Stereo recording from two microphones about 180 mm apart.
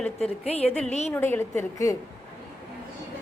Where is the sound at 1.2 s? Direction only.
10° left (ahead or behind).